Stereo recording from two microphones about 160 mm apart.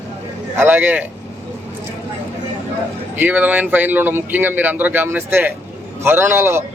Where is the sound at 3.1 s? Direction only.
10° right (ahead or behind).